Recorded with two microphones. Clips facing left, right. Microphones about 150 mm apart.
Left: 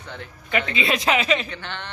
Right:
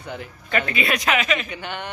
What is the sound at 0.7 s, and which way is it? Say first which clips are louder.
Speech: left 2 dB; 25° left (ahead or behind).